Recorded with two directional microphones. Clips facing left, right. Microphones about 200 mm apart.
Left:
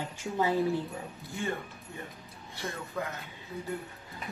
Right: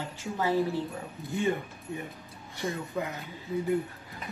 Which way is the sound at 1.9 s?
15° right (ahead or behind).